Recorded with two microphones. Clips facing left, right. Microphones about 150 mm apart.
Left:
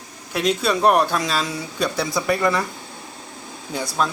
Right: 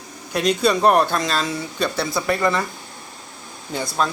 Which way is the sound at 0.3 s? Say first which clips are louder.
Right 2 dB; 5° left (ahead or behind).